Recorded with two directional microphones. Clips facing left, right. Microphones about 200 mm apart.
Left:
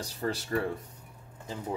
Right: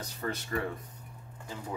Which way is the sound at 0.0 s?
35° left (ahead or behind).